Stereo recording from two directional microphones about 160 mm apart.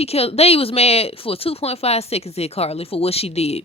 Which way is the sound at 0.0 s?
40° left (ahead or behind).